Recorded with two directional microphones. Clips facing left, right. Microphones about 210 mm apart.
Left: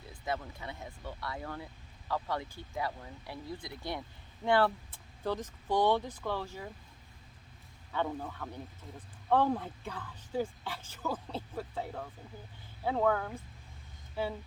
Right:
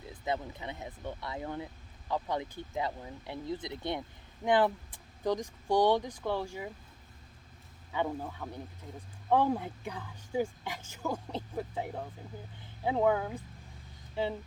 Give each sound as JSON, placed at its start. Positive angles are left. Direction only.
{"t": 0.1, "sound": "speech", "side_deg": -20}
{"t": 7.9, "sound": "speech", "side_deg": -10}